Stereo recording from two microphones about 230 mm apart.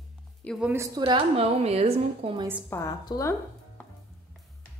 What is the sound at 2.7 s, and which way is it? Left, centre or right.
Speech, centre.